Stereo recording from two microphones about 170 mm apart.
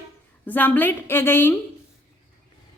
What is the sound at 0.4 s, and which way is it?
A woman's voice, 10° left (ahead or behind).